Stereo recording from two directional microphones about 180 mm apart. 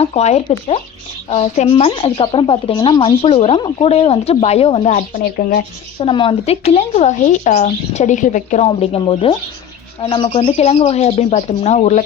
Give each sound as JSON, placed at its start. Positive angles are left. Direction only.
{"t": 0.0, "sound": "speech", "side_deg": 35}
{"t": 5.1, "sound": "speech", "side_deg": 55}
{"t": 6.0, "sound": "speech", "side_deg": 30}
{"t": 8.6, "sound": "speech", "side_deg": 30}